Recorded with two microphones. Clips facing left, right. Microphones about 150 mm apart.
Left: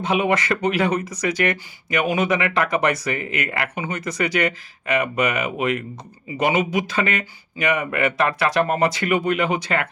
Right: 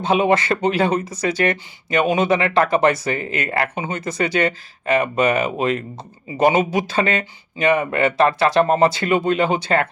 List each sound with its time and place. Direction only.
0.0 s speech: 30° right (ahead or behind)